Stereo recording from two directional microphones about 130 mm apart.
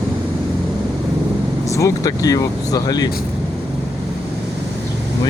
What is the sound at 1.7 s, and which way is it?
Speech, 25° left (ahead or behind).